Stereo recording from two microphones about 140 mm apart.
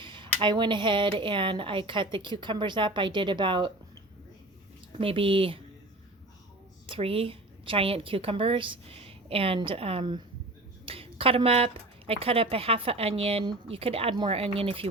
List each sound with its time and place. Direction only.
0.0 s speech: 35° right (ahead or behind)
4.9 s speech: 40° right (ahead or behind)
6.8 s a woman's voice: 40° right (ahead or behind)